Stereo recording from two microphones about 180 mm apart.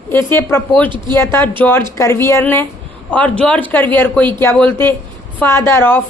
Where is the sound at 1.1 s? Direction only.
15° left (ahead or behind).